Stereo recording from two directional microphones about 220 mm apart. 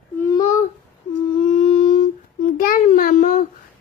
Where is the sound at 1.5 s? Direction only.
30° left (ahead or behind).